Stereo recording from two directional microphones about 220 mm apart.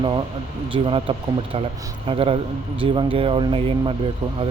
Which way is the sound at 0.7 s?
25° right (ahead or behind).